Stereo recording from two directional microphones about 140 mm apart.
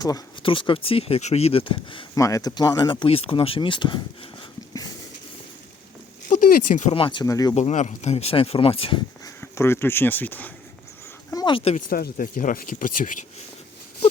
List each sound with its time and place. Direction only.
0.4 s speech: 40° left (ahead or behind)
2.1 s speech: 25° left (ahead or behind)
6.2 s speech: 80° left; by 6.9 s 65° left (ahead or behind)
6.9 s speech: 35° left (ahead or behind)
7.3 s speech: 25° left (ahead or behind)
7.5 s speech: 55° left (ahead or behind); by 9.0 s 40° left (ahead or behind)
9.2 s speech: 20° left (ahead or behind)
11.3 s a sound: 25° left (ahead or behind)
11.5 s speech: 45° left (ahead or behind)
11.9 s speech: 85° left